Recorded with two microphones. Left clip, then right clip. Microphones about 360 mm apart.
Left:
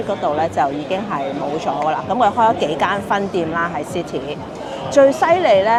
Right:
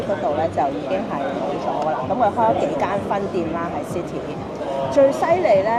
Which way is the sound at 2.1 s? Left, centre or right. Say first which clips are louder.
Left 3 dB; left.